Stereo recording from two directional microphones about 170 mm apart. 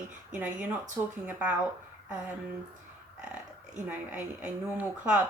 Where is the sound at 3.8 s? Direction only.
10° right (ahead or behind).